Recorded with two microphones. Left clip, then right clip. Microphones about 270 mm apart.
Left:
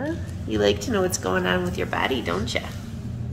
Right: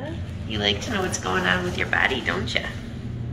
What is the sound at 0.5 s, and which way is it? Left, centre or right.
Speech, left.